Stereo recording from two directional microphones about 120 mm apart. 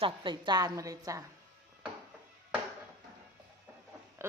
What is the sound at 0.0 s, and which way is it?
A woman's voice, 40° right (ahead or behind).